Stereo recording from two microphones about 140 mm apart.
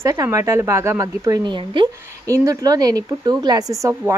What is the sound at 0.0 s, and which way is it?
A woman's voice, 25° right (ahead or behind).